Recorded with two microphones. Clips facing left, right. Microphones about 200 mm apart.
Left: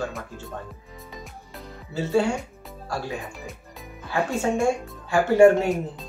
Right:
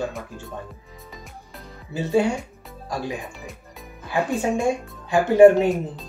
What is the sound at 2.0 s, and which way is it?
Speech, 15° right (ahead or behind).